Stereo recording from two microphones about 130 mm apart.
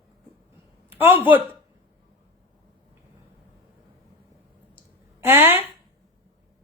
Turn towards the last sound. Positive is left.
turn(degrees=-15)  # may be behind; listen again after turning